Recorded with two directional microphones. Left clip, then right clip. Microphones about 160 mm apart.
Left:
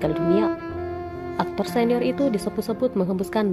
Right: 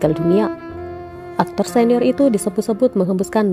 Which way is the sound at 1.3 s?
50° right (ahead or behind).